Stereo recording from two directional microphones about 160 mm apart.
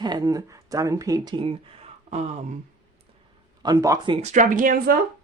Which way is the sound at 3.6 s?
20° right (ahead or behind).